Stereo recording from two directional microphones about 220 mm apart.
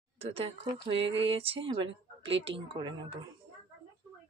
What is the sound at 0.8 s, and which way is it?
A woman's voice, 25° right (ahead or behind).